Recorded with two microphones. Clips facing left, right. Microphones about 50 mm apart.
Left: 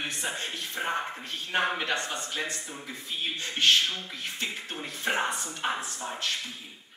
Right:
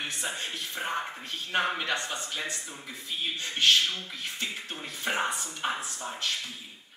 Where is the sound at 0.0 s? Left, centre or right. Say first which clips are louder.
Left 1 dB; centre.